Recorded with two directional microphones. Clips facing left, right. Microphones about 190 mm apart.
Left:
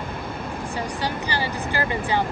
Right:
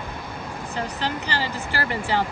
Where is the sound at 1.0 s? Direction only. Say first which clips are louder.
Left 1 dB; 15° left (ahead or behind).